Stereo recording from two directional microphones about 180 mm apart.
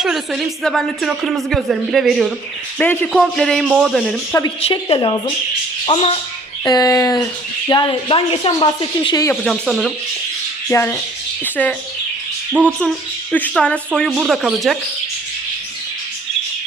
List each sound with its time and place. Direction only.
0.0 s a woman's voice: centre (ahead or behind)
2.7 s a woman's voice: 10° left (ahead or behind)
4.3 s speech: 20° left (ahead or behind)
4.6 s speech: 30° left (ahead or behind)
9.3 s a woman's voice: centre (ahead or behind)
10.7 s speech: 15° left (ahead or behind)
13.3 s a woman's voice: 5° left (ahead or behind)